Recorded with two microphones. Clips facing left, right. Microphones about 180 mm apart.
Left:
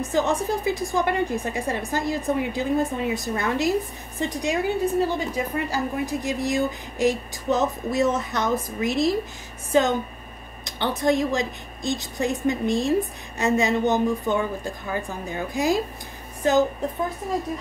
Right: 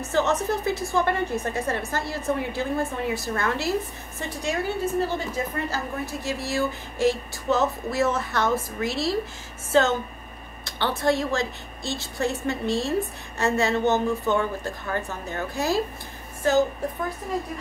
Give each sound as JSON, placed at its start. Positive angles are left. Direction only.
{"t": 0.1, "sound": "a woman's voice", "side_deg": 15}